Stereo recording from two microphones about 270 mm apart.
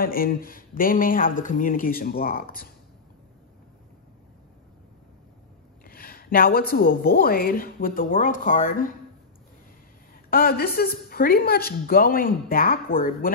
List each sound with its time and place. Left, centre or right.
0.0 s a woman's voice: left
5.9 s a woman's voice: left
10.3 s a woman's voice: left